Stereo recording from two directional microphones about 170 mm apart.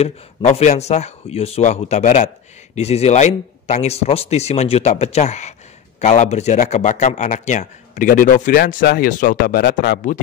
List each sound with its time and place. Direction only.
0.0 s speech: 40° left (ahead or behind)